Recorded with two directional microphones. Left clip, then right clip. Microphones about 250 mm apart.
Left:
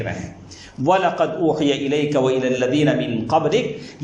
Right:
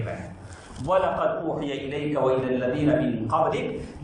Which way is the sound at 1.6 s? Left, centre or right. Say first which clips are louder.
Left 10 dB; left.